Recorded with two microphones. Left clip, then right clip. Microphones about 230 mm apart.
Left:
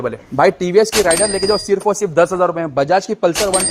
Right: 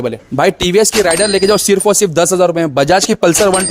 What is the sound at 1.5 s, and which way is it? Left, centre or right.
Speech, right.